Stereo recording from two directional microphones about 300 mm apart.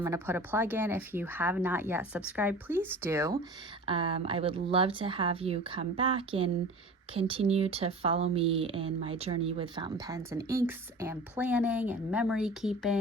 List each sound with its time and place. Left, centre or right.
0.0 s speech: centre